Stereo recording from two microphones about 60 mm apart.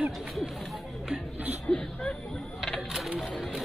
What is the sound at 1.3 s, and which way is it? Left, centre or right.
Speech, right.